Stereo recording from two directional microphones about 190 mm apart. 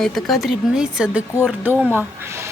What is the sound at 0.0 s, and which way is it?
A woman's voice, centre (ahead or behind).